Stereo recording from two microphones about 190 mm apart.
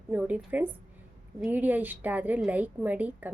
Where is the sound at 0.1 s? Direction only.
10° right (ahead or behind).